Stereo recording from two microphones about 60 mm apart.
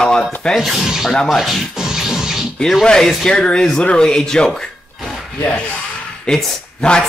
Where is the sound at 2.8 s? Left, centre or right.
Centre.